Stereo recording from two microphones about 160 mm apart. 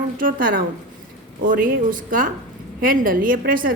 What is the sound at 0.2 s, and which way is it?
A woman's voice, 60° right (ahead or behind).